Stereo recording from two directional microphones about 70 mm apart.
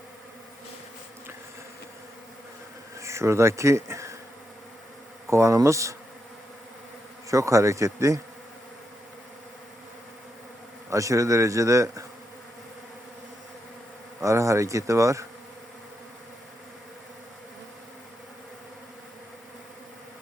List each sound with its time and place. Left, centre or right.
2.9 s insect: right
5.3 s a man's voice: right
7.3 s a man's voice: right
10.8 s a man's voice: right
14.2 s a man's voice: right